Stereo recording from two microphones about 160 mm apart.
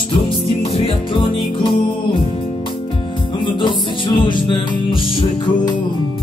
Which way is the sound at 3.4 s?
30° left (ahead or behind).